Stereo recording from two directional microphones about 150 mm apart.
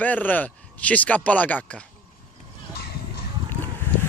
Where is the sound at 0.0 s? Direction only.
10° left (ahead or behind).